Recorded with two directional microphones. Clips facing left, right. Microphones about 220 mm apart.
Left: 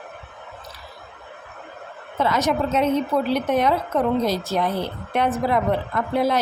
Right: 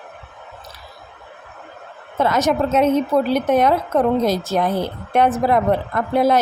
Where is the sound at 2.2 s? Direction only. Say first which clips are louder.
Right 3 dB; 45° right (ahead or behind).